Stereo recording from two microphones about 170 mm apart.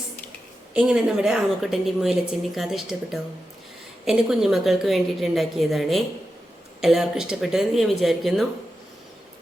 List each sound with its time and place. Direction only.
0.7 s a woman's voice: 5° right (ahead or behind)